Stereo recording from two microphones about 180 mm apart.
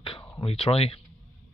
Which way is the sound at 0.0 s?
30° left (ahead or behind).